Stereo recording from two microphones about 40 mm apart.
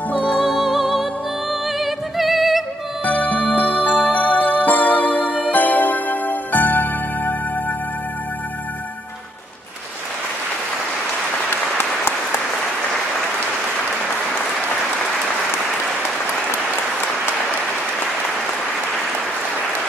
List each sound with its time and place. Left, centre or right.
0.1 s music: left
0.5 s music: centre
3.1 s music: left